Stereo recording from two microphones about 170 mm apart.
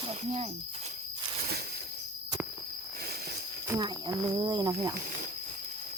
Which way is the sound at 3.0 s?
70° right (ahead or behind).